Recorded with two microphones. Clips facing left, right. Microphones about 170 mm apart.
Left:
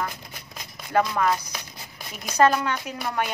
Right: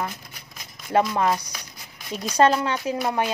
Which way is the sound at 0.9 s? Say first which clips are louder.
Right 1 dB; 25° right (ahead or behind).